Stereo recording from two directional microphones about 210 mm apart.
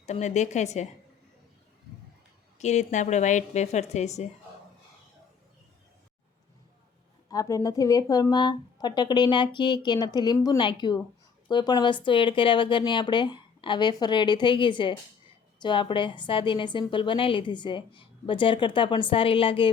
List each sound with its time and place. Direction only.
0.0 s a woman's voice: 35° left (ahead or behind)
2.6 s a woman's voice: 35° left (ahead or behind)
7.3 s speech: 15° left (ahead or behind)